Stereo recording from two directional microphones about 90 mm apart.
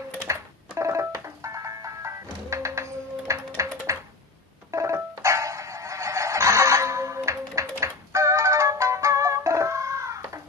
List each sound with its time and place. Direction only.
0.3 s music: 35° right (ahead or behind)